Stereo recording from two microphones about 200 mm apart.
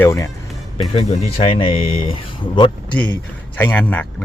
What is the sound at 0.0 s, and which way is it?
Speech, 15° left (ahead or behind).